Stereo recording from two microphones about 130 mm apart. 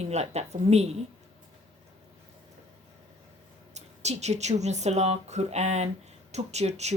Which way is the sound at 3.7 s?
60° right (ahead or behind).